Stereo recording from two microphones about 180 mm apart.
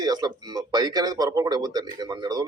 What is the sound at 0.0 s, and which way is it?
A man's voice, 20° right (ahead or behind).